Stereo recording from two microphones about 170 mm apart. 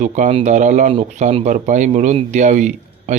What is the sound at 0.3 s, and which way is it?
Speech, 40° right (ahead or behind).